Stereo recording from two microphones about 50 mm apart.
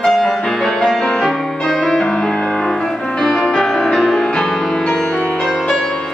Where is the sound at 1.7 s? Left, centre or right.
Centre.